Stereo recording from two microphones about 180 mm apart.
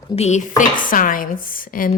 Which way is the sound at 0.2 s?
40° left (ahead or behind).